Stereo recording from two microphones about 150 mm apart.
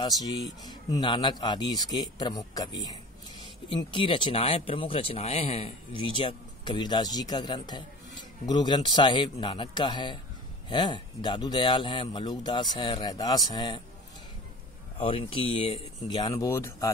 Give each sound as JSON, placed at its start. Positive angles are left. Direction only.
{"t": 0.0, "sound": "speech", "side_deg": 25}
{"t": 15.0, "sound": "speech", "side_deg": 35}
{"t": 16.2, "sound": "speech", "side_deg": 20}